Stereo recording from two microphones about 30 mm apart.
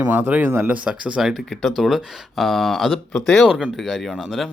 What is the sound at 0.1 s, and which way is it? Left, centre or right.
Speech, right.